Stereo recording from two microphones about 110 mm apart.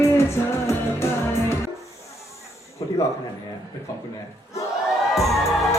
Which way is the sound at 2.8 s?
35° left (ahead or behind).